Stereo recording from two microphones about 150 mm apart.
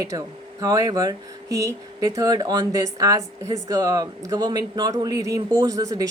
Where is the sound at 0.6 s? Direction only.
25° right (ahead or behind).